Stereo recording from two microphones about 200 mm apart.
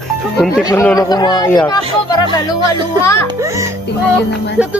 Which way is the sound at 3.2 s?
15° right (ahead or behind).